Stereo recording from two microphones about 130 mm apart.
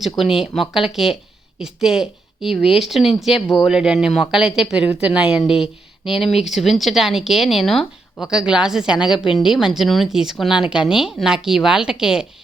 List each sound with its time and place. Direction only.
0.0 s a woman's voice: centre (ahead or behind)
9.2 s speech: 40° left (ahead or behind)
9.5 s speech: 5° right (ahead or behind)